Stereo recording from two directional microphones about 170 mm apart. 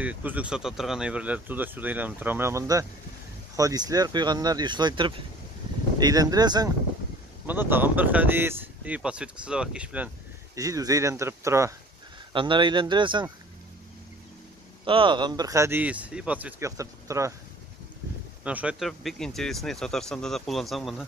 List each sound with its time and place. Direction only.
0.0 s speech: 10° right (ahead or behind)
7.4 s speech: 10° right (ahead or behind)
10.6 s speech: 20° right (ahead or behind)
12.3 s speech: 30° right (ahead or behind)
14.9 s speech: 30° right (ahead or behind)
18.4 s speech: 10° right (ahead or behind)